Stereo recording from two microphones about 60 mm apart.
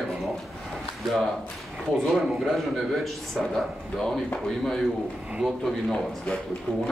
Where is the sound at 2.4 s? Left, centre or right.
Centre.